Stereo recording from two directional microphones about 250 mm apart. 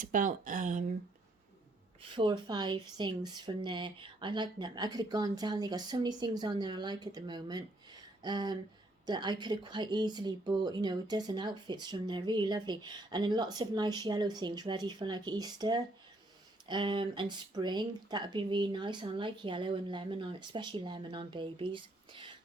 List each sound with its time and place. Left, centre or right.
0.0 s speech: right
2.0 s speech: centre